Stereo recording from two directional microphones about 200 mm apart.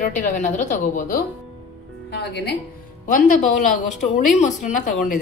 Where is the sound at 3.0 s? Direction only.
40° left (ahead or behind).